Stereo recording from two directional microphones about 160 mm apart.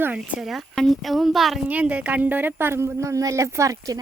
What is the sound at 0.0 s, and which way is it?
A woman's voice, 5° right (ahead or behind).